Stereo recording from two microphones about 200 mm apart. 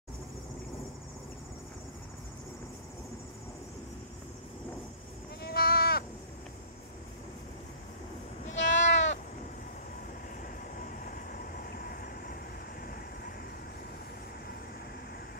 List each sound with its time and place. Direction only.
5.4 s sheep: 50° left (ahead or behind)
8.5 s sheep: 65° left (ahead or behind)
10.4 s train: 45° left (ahead or behind)
12.8 s vehicle: 50° left (ahead or behind)